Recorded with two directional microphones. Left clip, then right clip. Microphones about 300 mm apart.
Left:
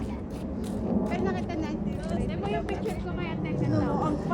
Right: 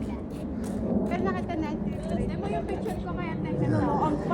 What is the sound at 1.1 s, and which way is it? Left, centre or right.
Speech, right.